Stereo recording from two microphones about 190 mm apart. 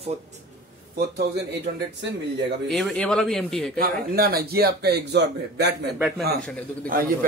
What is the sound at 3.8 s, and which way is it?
Speech, 55° right (ahead or behind).